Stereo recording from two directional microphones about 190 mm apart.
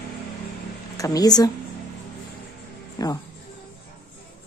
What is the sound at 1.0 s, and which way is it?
Speech, 20° left (ahead or behind).